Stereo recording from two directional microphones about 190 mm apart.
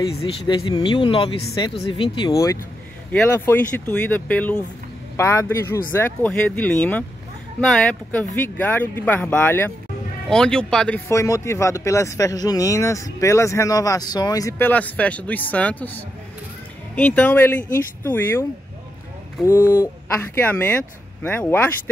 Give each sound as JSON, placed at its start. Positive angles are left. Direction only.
{"t": 0.2, "sound": "a man's voice", "side_deg": 25}
{"t": 11.1, "sound": "speech", "side_deg": 15}
{"t": 19.4, "sound": "speech", "side_deg": 15}